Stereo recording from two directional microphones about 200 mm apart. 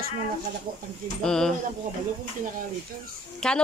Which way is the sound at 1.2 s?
5° left (ahead or behind).